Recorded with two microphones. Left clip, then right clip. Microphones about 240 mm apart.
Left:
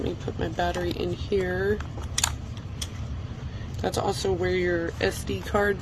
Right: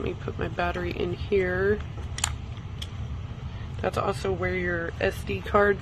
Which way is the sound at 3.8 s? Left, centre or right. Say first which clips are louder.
Left 1 dB; right.